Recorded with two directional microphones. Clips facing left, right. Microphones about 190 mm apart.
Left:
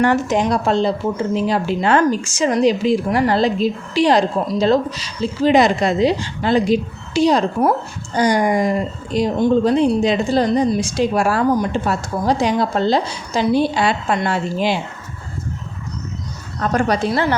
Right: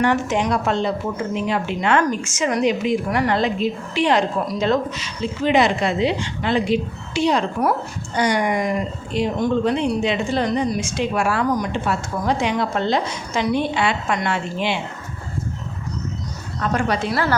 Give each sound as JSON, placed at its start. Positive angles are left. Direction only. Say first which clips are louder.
{"t": 0.0, "sound": "speech", "louder": "left 3 dB", "side_deg": 40}
{"t": 16.6, "sound": "speech", "louder": "left 4 dB", "side_deg": 40}
{"t": 17.1, "sound": "a woman's voice", "louder": "left 3 dB", "side_deg": 20}